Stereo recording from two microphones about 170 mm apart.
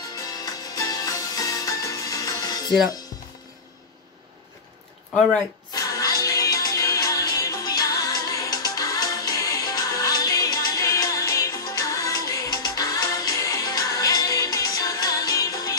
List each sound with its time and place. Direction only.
0.1 s music: 20° left (ahead or behind)
5.7 s music: 20° left (ahead or behind)